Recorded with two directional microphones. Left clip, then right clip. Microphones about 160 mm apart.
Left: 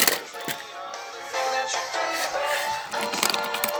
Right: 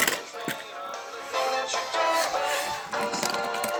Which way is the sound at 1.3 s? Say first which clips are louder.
Left 1 dB; 35° right (ahead or behind).